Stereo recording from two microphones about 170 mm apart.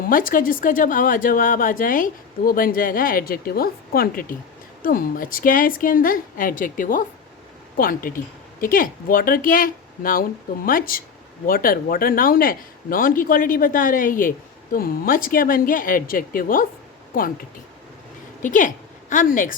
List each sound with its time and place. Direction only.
0.1 s speech: 55° left (ahead or behind)
18.4 s speech: 50° left (ahead or behind)